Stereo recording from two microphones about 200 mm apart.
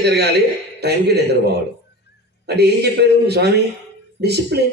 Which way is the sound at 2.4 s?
55° right (ahead or behind).